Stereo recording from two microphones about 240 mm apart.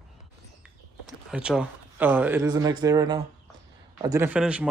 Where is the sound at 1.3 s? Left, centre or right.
Centre.